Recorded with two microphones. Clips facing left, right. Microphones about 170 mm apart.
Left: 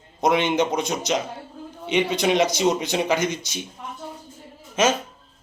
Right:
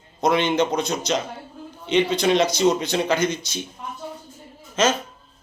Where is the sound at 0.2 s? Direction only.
15° left (ahead or behind).